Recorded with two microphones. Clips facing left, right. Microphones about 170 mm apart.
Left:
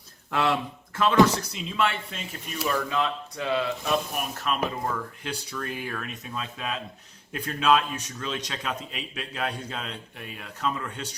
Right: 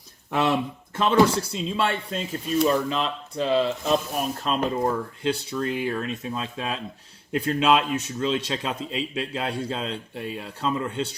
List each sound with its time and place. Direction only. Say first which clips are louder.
0.3 s speech: right 3 dB; 20° right (ahead or behind)
2.9 s speech: right 1 dB; 25° right (ahead or behind)